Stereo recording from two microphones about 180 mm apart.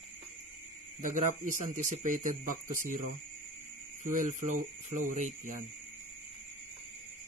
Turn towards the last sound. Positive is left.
turn(degrees=-45)  # may be behind; listen again after turning